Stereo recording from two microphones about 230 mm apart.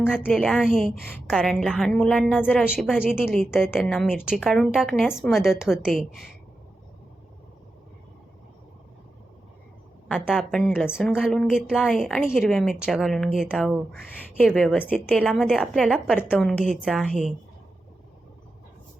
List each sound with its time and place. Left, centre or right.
0.1 s a woman's voice: centre
10.1 s a woman's voice: centre